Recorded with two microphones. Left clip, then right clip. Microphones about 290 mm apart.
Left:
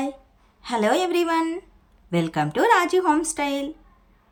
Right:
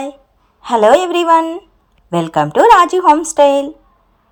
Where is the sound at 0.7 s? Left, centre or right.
Centre.